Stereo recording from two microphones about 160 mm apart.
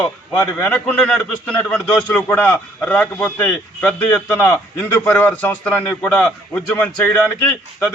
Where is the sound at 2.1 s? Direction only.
10° left (ahead or behind).